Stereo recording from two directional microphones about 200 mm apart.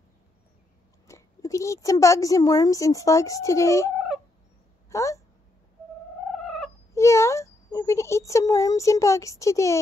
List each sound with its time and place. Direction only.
1.0 s speech: 15° left (ahead or behind)
6.3 s cat: centre (ahead or behind)
6.9 s a child's voice: 15° left (ahead or behind)